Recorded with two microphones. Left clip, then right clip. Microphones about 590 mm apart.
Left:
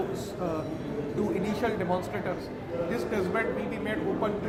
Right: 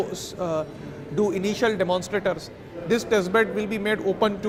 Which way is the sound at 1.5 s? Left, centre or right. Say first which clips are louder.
Right 6 dB; right.